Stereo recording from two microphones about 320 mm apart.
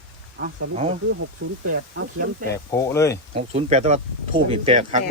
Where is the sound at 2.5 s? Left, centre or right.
Centre.